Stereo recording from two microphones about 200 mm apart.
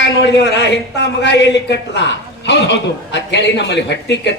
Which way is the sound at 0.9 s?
60° left (ahead or behind).